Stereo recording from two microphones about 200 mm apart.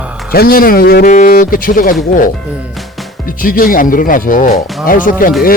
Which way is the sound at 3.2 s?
45° left (ahead or behind).